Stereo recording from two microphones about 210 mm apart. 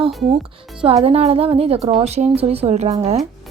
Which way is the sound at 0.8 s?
30° right (ahead or behind).